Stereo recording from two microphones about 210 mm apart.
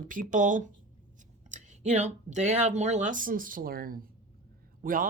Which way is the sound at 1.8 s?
35° right (ahead or behind).